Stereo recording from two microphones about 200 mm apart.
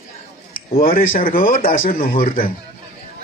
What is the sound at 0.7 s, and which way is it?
A man's voice, 45° left (ahead or behind).